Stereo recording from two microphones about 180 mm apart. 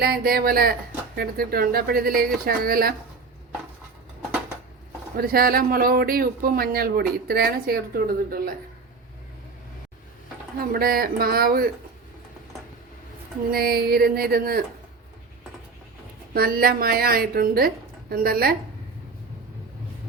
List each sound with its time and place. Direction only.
0.0 s speech: 60° right (ahead or behind)
5.1 s speech: 55° right (ahead or behind)
10.6 s speech: 55° right (ahead or behind)
13.5 s speech: 60° right (ahead or behind)
16.3 s speech: 55° right (ahead or behind)